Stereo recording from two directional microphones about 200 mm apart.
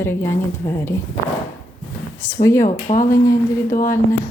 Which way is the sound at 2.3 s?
15° left (ahead or behind).